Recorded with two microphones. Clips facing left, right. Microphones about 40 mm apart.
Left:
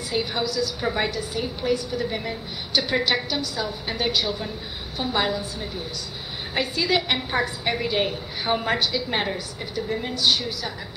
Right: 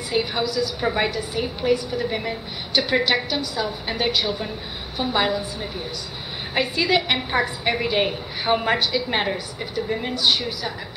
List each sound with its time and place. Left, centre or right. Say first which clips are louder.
0.1 s a woman's voice: right 3 dB; centre